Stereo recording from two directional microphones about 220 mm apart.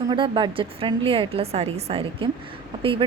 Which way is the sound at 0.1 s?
20° right (ahead or behind).